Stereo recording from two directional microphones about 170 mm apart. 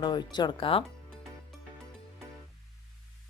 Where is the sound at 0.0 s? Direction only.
25° left (ahead or behind).